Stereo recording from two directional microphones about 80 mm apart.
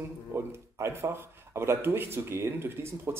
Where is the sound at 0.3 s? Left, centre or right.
Right.